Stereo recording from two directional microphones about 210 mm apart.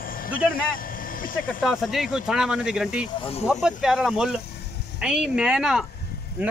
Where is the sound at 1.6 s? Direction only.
Centre (ahead or behind).